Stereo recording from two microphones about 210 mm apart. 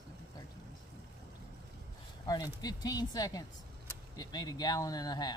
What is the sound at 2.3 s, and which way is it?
Speech, 20° left (ahead or behind).